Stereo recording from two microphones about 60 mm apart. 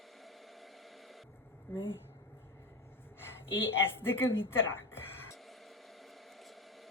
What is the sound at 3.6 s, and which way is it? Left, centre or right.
A woman's voice, left.